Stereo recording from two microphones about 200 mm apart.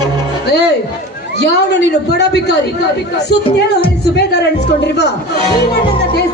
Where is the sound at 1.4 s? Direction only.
60° left (ahead or behind).